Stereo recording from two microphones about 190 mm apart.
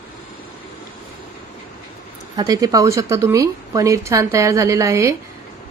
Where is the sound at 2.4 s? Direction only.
20° right (ahead or behind).